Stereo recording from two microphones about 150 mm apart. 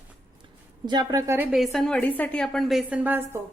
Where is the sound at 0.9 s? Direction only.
25° right (ahead or behind).